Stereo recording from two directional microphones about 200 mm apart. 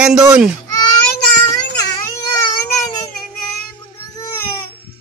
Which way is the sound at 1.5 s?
20° left (ahead or behind).